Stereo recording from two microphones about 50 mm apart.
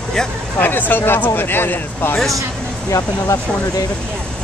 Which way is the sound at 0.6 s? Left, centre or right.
Left.